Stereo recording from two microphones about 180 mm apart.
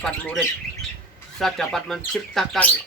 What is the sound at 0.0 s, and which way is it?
Speech, 5° left (ahead or behind).